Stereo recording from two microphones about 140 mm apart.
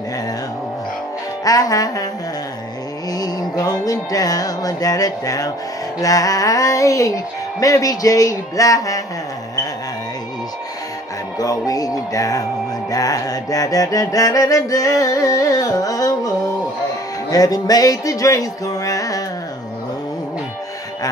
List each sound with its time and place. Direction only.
1.4 s music: 25° left (ahead or behind)
3.1 s music: 25° left (ahead or behind)
11.3 s music: 25° left (ahead or behind)